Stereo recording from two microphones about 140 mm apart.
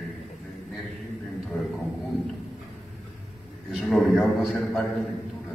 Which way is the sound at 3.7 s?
Centre (ahead or behind).